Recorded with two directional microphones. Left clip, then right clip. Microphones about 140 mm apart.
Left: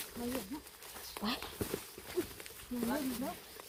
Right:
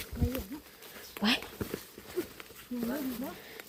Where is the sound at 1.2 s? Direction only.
35° right (ahead or behind).